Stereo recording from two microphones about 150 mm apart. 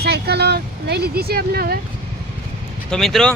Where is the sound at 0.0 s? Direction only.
90° right.